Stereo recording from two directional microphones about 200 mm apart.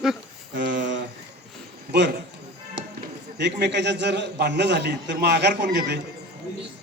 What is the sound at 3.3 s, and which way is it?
A man's voice, 60° right (ahead or behind).